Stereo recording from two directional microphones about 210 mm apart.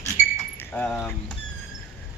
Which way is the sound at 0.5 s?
10° left (ahead or behind).